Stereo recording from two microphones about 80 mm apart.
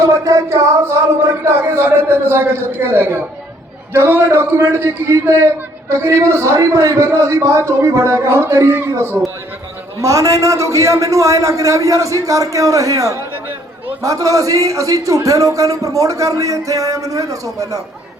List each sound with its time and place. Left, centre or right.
0.0 s a man's voice: right
10.0 s a man's voice: right